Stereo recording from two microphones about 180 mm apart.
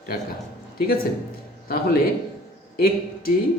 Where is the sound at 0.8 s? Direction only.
55° left (ahead or behind).